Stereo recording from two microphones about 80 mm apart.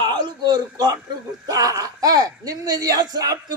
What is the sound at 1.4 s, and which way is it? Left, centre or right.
Speech, right.